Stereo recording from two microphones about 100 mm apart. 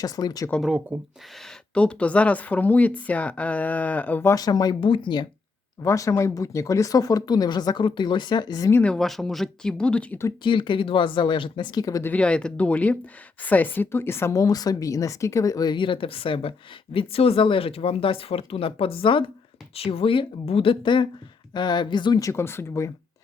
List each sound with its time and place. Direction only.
0.0 s speech: 40° left (ahead or behind)
0.6 s speech: 10° right (ahead or behind)
1.7 s speech: 10° left (ahead or behind)
4.3 s speech: 40° left (ahead or behind)
4.8 s speech: 55° left (ahead or behind)
5.8 s speech: 30° left (ahead or behind)
8.8 s speech: 5° left (ahead or behind)
10.4 s speech: 55° left (ahead or behind); by 12.0 s 40° left (ahead or behind)
12.0 s a woman's voice: 15° left (ahead or behind)
14.3 s speech: 40° left (ahead or behind); by 19.2 s 65° left (ahead or behind)
19.7 s speech: 75° left (ahead or behind); by 22.2 s 50° left (ahead or behind)
22.2 s a woman's voice: 30° left (ahead or behind)